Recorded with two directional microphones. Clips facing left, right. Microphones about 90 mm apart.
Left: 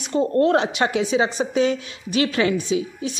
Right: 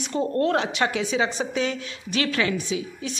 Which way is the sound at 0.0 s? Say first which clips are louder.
Left 5 dB; 20° left (ahead or behind).